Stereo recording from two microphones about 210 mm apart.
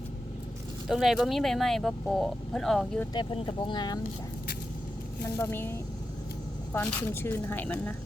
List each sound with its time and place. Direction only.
0.9 s speech: centre (ahead or behind)
3.1 s speech: 20° left (ahead or behind)
5.2 s speech: 10° left (ahead or behind)